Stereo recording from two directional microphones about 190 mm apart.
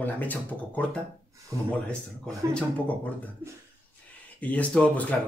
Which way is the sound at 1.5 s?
15° right (ahead or behind).